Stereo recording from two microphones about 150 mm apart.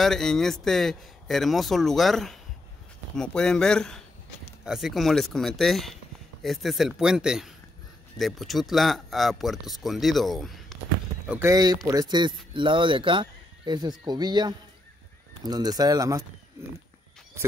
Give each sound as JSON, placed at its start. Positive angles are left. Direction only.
{"t": 0.0, "sound": "speech", "side_deg": 0}
{"t": 11.2, "sound": "speech", "side_deg": -15}
{"t": 11.5, "sound": "speech", "side_deg": -25}